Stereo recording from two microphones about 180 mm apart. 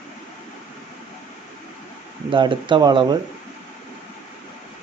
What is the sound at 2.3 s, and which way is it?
Speech, 25° right (ahead or behind).